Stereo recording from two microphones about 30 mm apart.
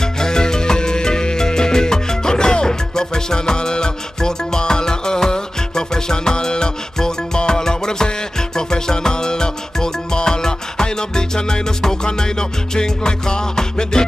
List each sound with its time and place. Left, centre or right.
0.0 s music: left